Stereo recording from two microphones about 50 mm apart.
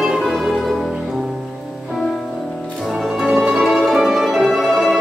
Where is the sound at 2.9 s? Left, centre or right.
Centre.